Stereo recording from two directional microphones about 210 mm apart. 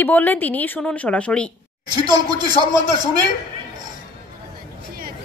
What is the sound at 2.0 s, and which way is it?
Speech, 20° right (ahead or behind).